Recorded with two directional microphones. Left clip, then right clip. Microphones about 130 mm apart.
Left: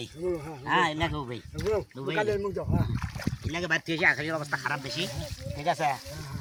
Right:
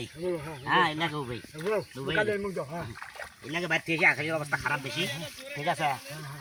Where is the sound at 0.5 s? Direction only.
45° left (ahead or behind).